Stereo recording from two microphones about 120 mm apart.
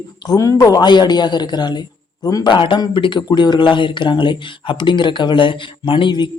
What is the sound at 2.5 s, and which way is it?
Speech, 45° left (ahead or behind).